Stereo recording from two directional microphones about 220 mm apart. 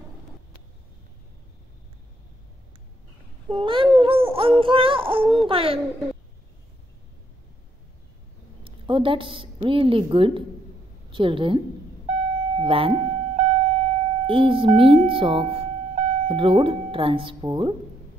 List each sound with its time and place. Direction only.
3.4 s child singing: 20° right (ahead or behind)
8.6 s a woman's voice: 25° right (ahead or behind)
11.1 s child singing: 25° right (ahead or behind)
12.1 s a sound: 30° right (ahead or behind)
16.3 s child singing: 25° right (ahead or behind)